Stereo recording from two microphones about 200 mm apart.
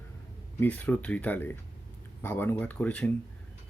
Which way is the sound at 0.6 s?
10° left (ahead or behind).